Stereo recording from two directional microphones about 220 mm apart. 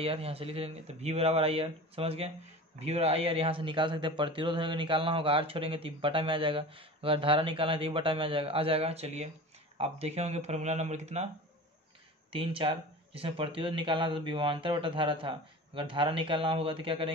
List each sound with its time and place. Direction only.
0.0 s speech: 25° right (ahead or behind)
12.3 s speech: 25° right (ahead or behind)